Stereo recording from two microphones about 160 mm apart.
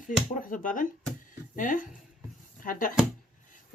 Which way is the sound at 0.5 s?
55° left (ahead or behind).